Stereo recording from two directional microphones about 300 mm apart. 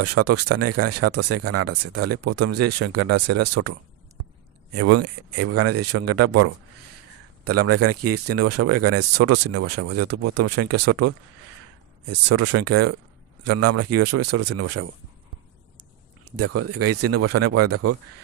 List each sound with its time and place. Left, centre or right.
0.0 s speech: right
4.7 s speech: right
16.3 s speech: right